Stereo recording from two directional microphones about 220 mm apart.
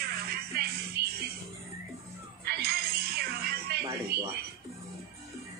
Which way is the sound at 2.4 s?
45° right (ahead or behind).